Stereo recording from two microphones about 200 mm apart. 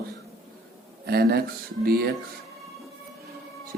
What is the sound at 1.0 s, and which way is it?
A man's voice, 50° right (ahead or behind).